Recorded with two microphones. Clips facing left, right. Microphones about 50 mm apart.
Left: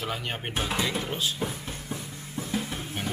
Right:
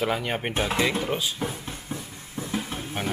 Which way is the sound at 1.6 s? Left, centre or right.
Centre.